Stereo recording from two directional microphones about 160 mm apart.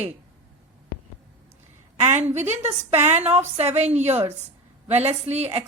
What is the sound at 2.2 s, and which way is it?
A woman's voice, 45° right (ahead or behind).